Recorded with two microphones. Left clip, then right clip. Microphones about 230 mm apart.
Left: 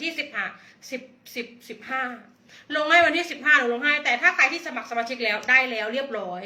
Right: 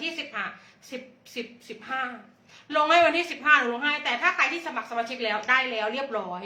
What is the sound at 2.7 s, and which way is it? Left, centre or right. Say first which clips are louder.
Speech: left 1 dB; centre.